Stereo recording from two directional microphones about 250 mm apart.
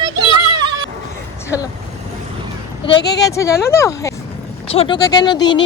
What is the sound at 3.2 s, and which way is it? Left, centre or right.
Speech, centre.